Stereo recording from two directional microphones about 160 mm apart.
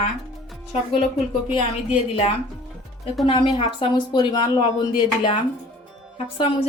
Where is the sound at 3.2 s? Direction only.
30° left (ahead or behind).